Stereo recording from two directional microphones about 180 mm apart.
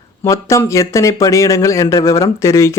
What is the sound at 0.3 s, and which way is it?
Speech, 15° left (ahead or behind).